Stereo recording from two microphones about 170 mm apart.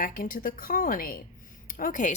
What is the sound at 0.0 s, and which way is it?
Speech, 55° left (ahead or behind).